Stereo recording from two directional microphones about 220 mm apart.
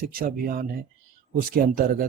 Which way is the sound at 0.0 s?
40° right (ahead or behind).